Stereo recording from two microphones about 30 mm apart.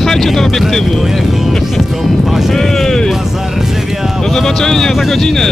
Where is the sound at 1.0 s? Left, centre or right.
Centre.